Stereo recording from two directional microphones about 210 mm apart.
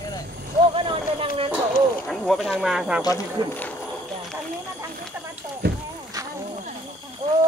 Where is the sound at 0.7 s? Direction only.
25° right (ahead or behind).